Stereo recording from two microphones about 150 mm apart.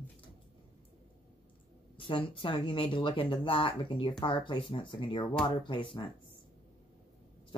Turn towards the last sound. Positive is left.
turn(degrees=35)  # may be behind; listen again after turning